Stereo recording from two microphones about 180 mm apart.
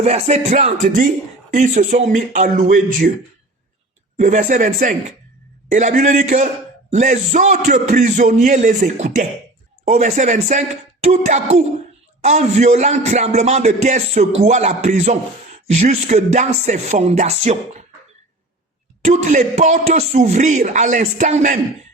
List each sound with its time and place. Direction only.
0.0 s a man's voice: 35° right (ahead or behind)
4.2 s a man's voice: 40° right (ahead or behind)
19.0 s speech: 40° right (ahead or behind)